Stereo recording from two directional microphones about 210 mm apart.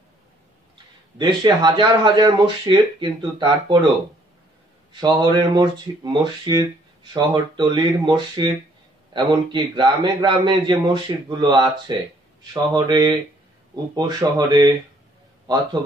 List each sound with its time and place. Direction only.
1.1 s speech: 20° right (ahead or behind)
5.0 s speech: 20° right (ahead or behind)
12.7 s speech: 20° right (ahead or behind)